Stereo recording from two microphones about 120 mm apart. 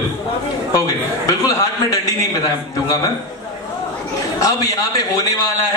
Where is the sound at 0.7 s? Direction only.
30° left (ahead or behind).